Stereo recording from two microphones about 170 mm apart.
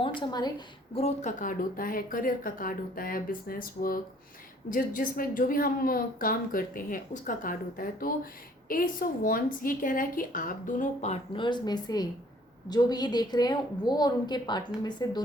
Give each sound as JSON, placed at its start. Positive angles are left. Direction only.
{"t": 0.0, "sound": "a woman's voice", "side_deg": 30}
{"t": 0.9, "sound": "a woman's voice", "side_deg": 40}
{"t": 11.3, "sound": "a woman's voice", "side_deg": 25}